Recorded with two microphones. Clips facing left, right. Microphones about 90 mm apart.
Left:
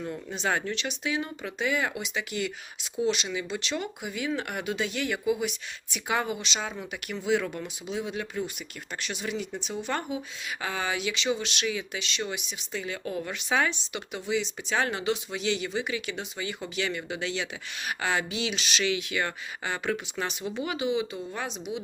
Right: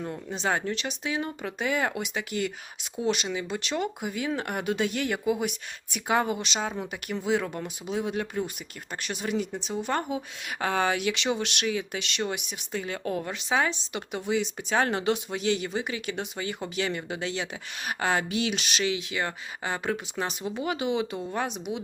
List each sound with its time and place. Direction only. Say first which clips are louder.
0.0 s speech: right 1 dB; 30° right (ahead or behind)
10.6 s speech: right 5 dB; 50° right (ahead or behind)
12.0 s speech: right 2 dB; 55° right (ahead or behind)
13.2 s speech: left 1 dB; 30° right (ahead or behind)
13.9 s speech: right 2 dB; 45° right (ahead or behind)
18.8 s speech: left 1 dB; 30° right (ahead or behind)
20.6 s speech: right 1 dB; 45° right (ahead or behind)